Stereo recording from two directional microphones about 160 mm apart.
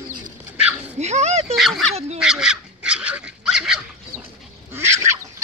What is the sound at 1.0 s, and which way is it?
Speech, 45° right (ahead or behind).